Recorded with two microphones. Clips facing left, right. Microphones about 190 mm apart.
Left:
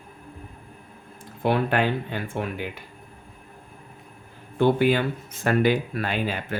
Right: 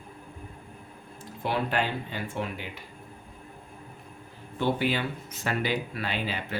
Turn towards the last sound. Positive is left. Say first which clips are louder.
# left 5 dB
turn(degrees=50)  # may be behind; listen again after turning